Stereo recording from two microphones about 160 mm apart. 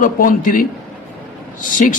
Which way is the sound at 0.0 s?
60° left (ahead or behind).